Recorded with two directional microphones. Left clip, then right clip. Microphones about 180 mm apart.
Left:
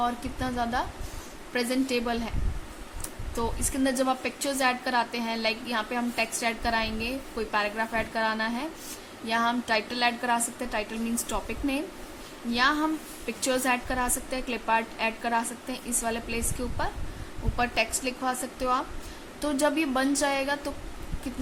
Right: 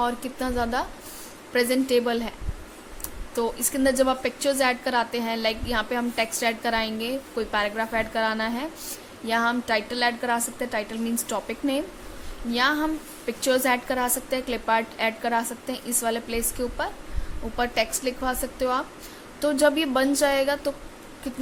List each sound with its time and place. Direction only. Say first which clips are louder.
0.0 s a woman's voice: right 3 dB; 20° right (ahead or behind)
3.3 s a woman's voice: right 4 dB; 15° right (ahead or behind)